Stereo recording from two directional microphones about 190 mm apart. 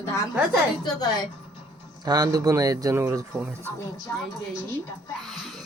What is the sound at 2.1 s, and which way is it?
Speech, 20° right (ahead or behind).